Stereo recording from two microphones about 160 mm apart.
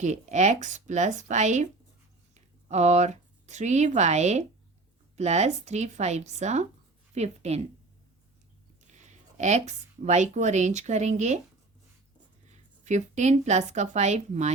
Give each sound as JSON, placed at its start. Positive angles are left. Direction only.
{"t": 0.0, "sound": "speech", "side_deg": -45}
{"t": 8.9, "sound": "speech", "side_deg": -50}
{"t": 12.8, "sound": "speech", "side_deg": -45}